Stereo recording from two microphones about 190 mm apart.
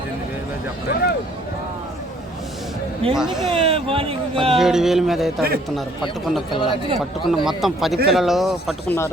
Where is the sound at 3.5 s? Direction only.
30° right (ahead or behind).